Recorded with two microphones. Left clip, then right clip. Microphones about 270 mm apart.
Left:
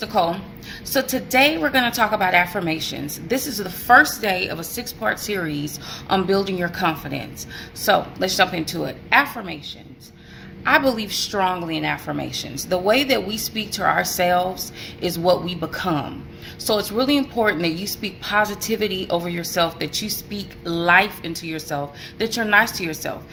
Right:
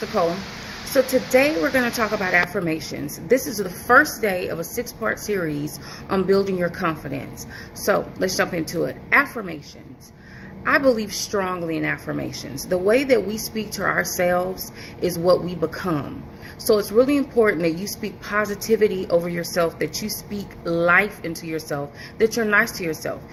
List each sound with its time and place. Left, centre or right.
1.3 s a woman's voice: centre
4.0 s a woman's voice: centre
10.6 s a woman's voice: centre